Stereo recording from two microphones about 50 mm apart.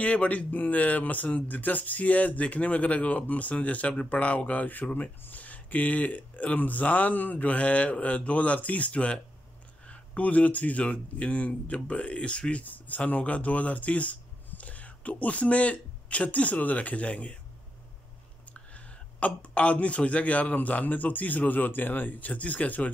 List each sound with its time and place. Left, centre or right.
0.0 s speech: left
18.5 s speech: left